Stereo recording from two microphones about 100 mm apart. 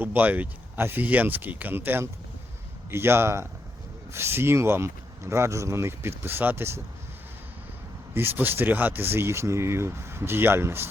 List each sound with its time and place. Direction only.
0.0 s speech: 15° right (ahead or behind)
8.1 s speech: 20° right (ahead or behind)